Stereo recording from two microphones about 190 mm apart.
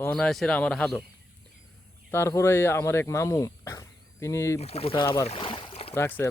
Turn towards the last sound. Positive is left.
turn(degrees=15)  # may be behind; listen again after turning